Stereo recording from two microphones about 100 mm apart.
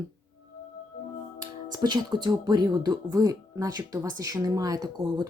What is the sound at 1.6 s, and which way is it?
Speech, 45° right (ahead or behind).